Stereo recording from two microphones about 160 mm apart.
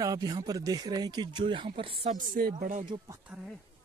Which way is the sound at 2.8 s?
25° right (ahead or behind).